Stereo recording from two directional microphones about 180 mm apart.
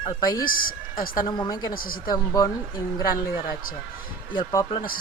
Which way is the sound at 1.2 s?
25° left (ahead or behind).